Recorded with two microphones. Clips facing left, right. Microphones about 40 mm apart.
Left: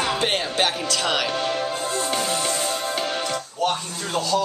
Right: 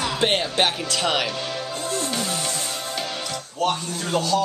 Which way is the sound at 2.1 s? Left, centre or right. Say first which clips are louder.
Left 3 dB; left.